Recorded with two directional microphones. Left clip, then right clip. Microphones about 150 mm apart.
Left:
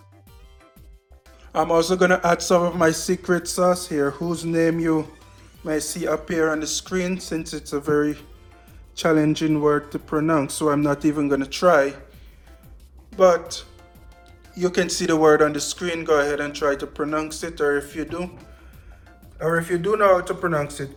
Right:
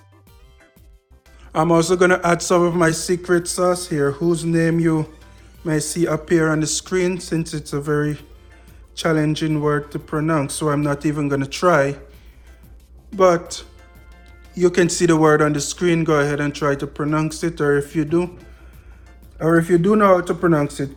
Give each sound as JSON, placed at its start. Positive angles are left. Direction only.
{"t": 1.5, "sound": "speech", "side_deg": -45}
{"t": 9.0, "sound": "speech", "side_deg": -60}
{"t": 13.1, "sound": "speech", "side_deg": -45}
{"t": 19.4, "sound": "a man's voice", "side_deg": -25}